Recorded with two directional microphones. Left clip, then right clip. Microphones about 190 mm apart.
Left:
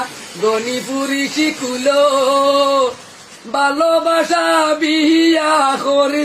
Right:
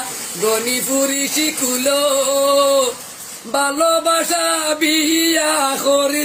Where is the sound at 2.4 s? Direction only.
Centre (ahead or behind).